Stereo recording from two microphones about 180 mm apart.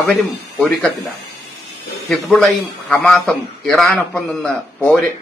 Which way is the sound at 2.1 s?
Centre (ahead or behind).